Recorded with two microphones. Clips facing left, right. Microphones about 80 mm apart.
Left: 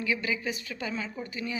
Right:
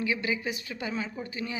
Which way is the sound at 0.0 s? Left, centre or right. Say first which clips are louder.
Right 1 dB; right.